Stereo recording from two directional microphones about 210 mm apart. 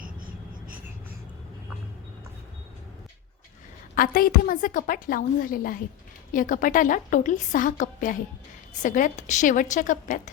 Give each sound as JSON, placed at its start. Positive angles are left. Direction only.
{"t": 3.9, "sound": "a woman's voice", "side_deg": 45}